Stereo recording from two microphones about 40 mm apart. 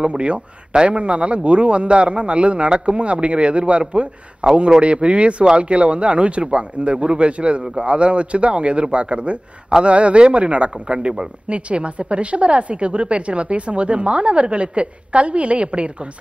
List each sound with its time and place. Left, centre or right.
0.0 s speech: right